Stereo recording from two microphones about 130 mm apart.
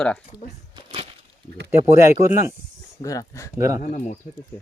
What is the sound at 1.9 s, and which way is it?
Speech, 20° right (ahead or behind).